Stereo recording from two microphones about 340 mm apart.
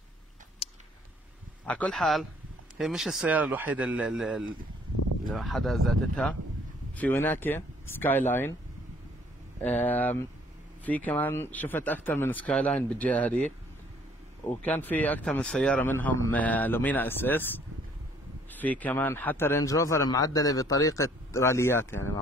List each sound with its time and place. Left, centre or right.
0.6 s a sound: centre
1.7 s speech: centre
9.6 s speech: centre
14.6 s speech: centre